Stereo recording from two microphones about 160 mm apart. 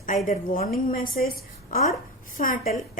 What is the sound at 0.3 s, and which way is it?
A woman's voice, 60° left (ahead or behind).